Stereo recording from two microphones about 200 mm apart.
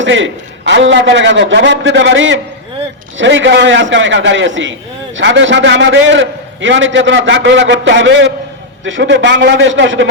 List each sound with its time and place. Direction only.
0.0 s a man's voice: 70° right (ahead or behind)